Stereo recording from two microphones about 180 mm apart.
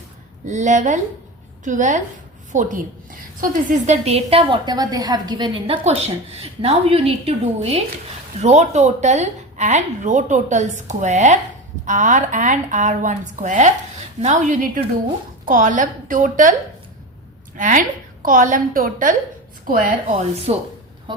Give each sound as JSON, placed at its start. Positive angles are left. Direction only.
{"t": 0.5, "sound": "a woman's voice", "side_deg": -40}
{"t": 17.6, "sound": "a woman's voice", "side_deg": -45}
{"t": 20.5, "sound": "a woman's voice", "side_deg": -40}
{"t": 21.1, "sound": "a sound", "side_deg": -25}